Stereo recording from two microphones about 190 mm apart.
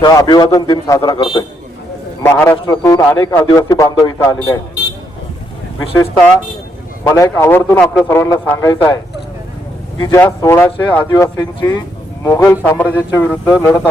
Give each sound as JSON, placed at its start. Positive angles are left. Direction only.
{"t": 0.0, "sound": "a man's voice", "side_deg": 20}
{"t": 2.2, "sound": "a man's voice", "side_deg": 10}
{"t": 7.0, "sound": "a man's voice", "side_deg": 15}
{"t": 10.0, "sound": "a man's voice", "side_deg": 15}